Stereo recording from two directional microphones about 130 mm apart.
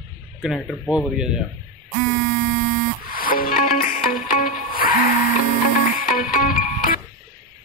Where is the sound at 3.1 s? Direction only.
90° left.